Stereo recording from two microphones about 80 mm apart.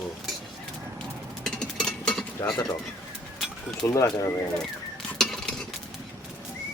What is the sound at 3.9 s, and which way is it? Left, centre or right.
Speech, left.